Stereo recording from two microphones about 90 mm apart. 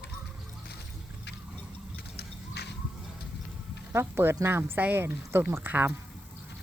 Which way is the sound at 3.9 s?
25° right (ahead or behind).